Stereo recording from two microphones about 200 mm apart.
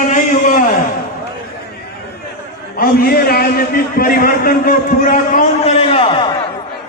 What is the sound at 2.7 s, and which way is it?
A man's voice, 50° left (ahead or behind).